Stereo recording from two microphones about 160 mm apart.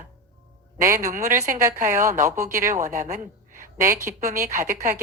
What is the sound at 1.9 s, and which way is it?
Speech, 20° right (ahead or behind).